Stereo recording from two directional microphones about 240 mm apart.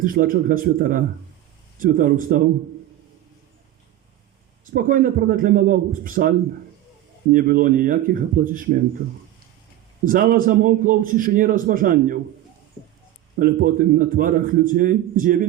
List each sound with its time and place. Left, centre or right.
0.0 s a man's voice: right
4.7 s a man's voice: right
7.3 s a man's voice: right
10.1 s a man's voice: right
13.4 s a man's voice: right